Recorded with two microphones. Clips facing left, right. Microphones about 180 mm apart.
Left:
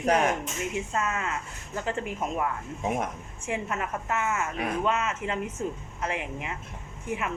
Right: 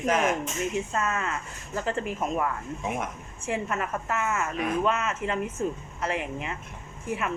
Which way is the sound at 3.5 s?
20° left (ahead or behind).